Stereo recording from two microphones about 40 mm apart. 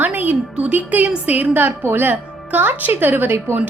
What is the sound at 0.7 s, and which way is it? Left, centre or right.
Speech, right.